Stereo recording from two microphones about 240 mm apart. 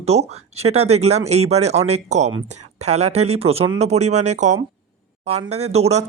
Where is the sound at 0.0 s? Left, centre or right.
Right.